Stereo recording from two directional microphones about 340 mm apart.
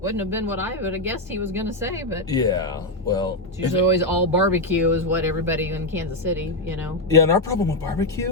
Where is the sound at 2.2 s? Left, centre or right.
Centre.